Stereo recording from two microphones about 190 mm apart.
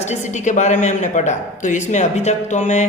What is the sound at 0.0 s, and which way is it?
Speech, 35° left (ahead or behind).